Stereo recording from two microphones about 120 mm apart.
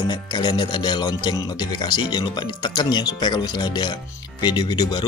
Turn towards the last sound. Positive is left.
turn(degrees=35)  # may be behind; listen again after turning